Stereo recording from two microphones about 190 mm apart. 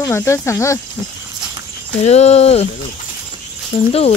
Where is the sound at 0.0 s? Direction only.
15° left (ahead or behind).